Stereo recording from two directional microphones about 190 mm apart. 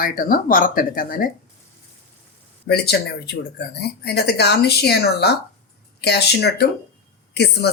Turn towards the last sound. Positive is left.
turn(degrees=60)  # may be behind; listen again after turning